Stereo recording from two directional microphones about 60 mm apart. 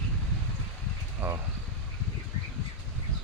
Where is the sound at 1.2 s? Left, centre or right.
Right.